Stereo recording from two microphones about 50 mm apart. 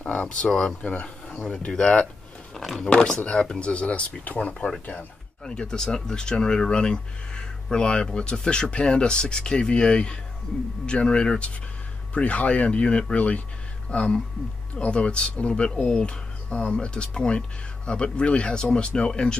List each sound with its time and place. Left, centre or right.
0.0 s speech: left
0.5 s speech: centre
0.8 s speech: left
2.5 s a sound: centre
3.2 s speech: centre
5.4 s speech: centre